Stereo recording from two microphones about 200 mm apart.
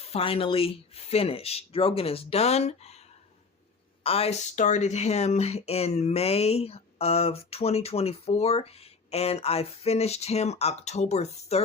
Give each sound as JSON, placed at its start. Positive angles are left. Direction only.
{"t": 0.0, "sound": "speech", "side_deg": 30}
{"t": 4.0, "sound": "speech", "side_deg": 30}